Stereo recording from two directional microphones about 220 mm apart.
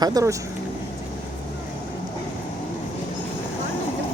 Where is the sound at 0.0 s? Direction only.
15° right (ahead or behind).